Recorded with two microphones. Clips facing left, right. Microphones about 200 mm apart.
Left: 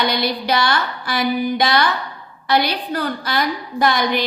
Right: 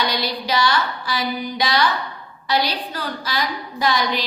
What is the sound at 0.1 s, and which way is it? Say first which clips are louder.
A woman's voice: left 3 dB; 55° left (ahead or behind).